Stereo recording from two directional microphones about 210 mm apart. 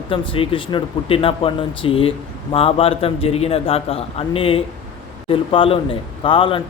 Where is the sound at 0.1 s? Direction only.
25° left (ahead or behind).